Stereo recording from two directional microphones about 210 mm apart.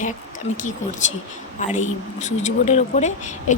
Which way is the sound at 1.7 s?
35° left (ahead or behind).